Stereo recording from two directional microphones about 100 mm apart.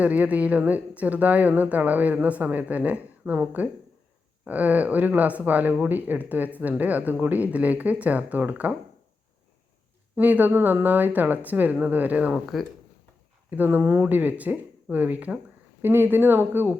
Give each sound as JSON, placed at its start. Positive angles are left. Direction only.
{"t": 0.0, "sound": "speech", "side_deg": -15}
{"t": 10.2, "sound": "speech", "side_deg": -15}
{"t": 12.3, "sound": "speech", "side_deg": -5}
{"t": 13.5, "sound": "speech", "side_deg": -20}